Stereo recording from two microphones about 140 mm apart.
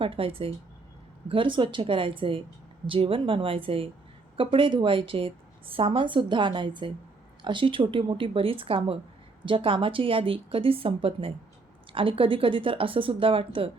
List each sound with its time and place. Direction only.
0.0 s a woman's voice: 40° right (ahead or behind)